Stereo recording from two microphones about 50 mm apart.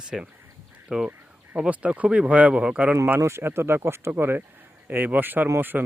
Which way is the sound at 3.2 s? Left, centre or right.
Right.